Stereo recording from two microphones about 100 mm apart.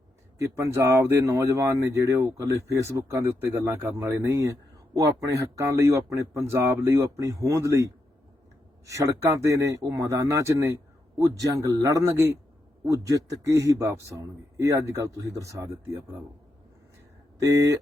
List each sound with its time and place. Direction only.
0.3 s speech: 30° right (ahead or behind)
8.9 s speech: 30° right (ahead or behind)
17.4 s speech: 35° right (ahead or behind)